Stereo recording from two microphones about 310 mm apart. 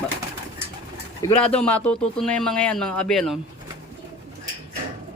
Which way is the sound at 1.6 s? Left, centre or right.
Centre.